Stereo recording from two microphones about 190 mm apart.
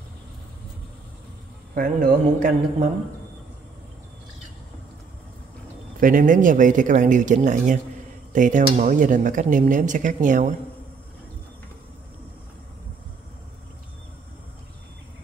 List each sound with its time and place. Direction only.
1.8 s speech: 45° right (ahead or behind)
5.9 s speech: 45° right (ahead or behind)